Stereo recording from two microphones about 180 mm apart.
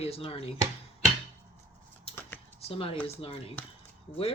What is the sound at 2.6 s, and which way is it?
Speech, 30° left (ahead or behind).